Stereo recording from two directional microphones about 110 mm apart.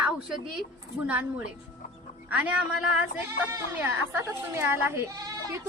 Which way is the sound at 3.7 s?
20° right (ahead or behind).